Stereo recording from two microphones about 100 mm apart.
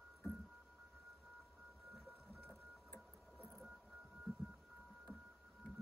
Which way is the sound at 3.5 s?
Centre (ahead or behind).